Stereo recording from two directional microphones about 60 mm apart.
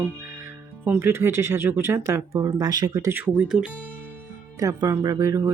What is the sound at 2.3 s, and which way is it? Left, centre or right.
Speech, right.